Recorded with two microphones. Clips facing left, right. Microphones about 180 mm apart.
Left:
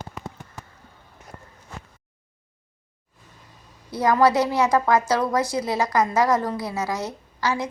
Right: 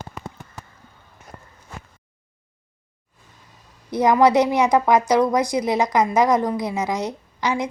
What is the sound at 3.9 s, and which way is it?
A woman's voice, 20° right (ahead or behind).